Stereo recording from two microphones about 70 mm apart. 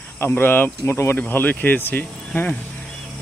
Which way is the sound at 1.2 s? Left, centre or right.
Left.